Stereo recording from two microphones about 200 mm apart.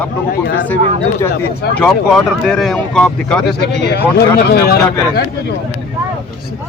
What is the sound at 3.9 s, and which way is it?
Speech, 50° left (ahead or behind).